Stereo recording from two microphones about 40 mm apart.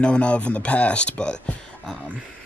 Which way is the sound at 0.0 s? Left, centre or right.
Left.